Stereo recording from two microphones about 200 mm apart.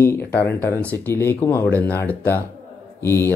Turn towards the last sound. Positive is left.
turn(degrees=10)  # may be behind; listen again after turning